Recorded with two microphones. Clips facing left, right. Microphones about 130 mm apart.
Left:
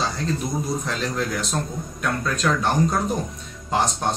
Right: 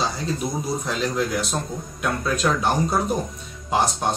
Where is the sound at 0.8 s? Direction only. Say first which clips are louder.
Right 2 dB; 5° right (ahead or behind).